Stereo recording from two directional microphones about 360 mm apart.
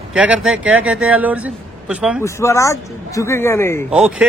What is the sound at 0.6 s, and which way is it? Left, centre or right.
Speech, right.